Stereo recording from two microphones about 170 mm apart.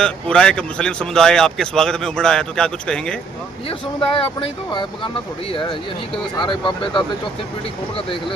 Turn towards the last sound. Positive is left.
turn(degrees=30)  # may be behind; listen again after turning